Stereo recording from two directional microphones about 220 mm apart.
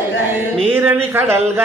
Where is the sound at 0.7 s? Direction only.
10° right (ahead or behind).